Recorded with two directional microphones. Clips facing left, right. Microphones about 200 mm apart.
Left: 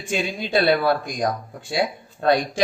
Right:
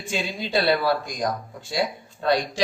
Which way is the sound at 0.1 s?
55° left (ahead or behind).